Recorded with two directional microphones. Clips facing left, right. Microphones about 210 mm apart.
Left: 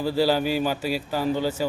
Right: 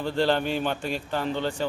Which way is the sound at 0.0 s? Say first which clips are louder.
Left 2 dB; 5° left (ahead or behind).